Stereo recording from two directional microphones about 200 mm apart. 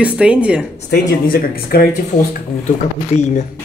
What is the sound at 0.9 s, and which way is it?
Speech, 45° left (ahead or behind).